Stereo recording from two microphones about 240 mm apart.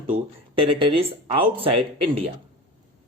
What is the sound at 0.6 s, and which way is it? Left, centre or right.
Speech, right.